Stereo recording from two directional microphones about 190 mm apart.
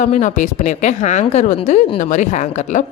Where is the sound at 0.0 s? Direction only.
40° left (ahead or behind).